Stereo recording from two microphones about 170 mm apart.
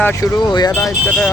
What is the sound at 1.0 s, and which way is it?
Speech, 10° left (ahead or behind).